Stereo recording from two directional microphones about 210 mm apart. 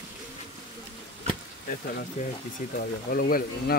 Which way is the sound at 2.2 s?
35° left (ahead or behind).